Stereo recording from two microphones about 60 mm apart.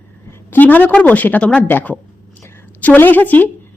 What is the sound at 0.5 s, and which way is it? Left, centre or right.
A woman's voice, left.